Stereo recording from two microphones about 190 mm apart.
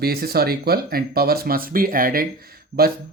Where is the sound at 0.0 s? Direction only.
55° right (ahead or behind).